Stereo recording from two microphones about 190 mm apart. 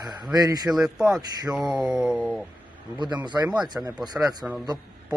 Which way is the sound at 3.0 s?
25° right (ahead or behind).